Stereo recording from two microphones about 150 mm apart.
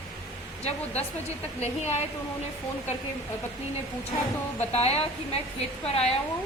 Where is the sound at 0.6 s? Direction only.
45° left (ahead or behind).